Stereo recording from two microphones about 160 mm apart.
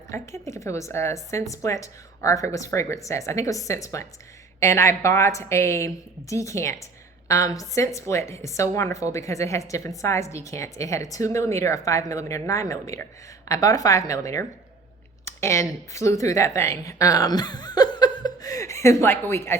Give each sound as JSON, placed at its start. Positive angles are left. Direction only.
{"t": 0.1, "sound": "a woman's voice", "side_deg": 20}